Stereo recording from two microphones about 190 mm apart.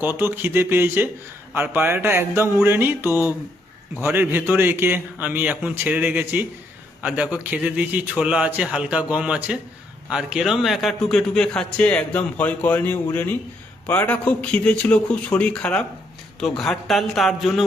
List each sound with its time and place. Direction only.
0.0 s a man's voice: 10° right (ahead or behind)
3.1 s speech: 15° left (ahead or behind)
3.9 s a man's voice: 10° right (ahead or behind)